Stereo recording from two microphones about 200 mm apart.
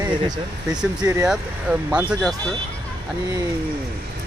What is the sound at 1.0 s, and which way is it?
Speech, 15° right (ahead or behind).